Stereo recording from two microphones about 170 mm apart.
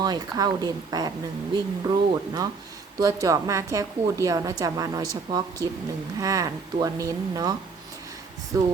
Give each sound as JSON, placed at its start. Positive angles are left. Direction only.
{"t": 0.0, "sound": "a woman's voice", "side_deg": -25}